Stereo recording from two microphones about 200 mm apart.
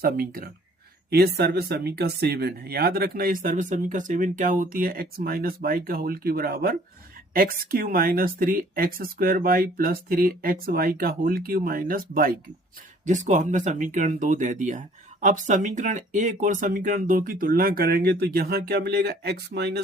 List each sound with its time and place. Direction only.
0.0 s speech: 45° right (ahead or behind)